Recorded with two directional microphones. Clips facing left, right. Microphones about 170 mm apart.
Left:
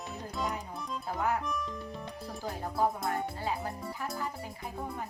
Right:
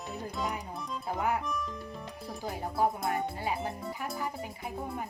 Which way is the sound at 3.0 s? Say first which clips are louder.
Right 1 dB; 15° right (ahead or behind).